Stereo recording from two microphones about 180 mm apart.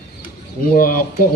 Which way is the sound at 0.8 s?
50° left (ahead or behind).